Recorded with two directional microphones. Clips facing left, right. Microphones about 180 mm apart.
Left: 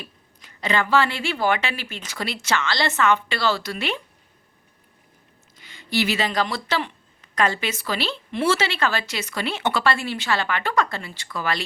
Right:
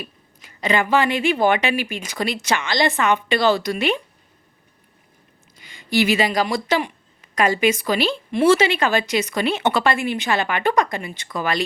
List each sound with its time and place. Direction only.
0.0 s speech: 10° right (ahead or behind)
5.5 s speech: 15° right (ahead or behind)